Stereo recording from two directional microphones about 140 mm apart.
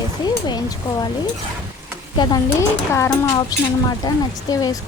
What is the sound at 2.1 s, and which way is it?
Speech, 30° left (ahead or behind).